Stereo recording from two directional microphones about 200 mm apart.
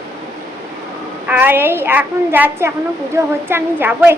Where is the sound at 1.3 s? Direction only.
10° right (ahead or behind).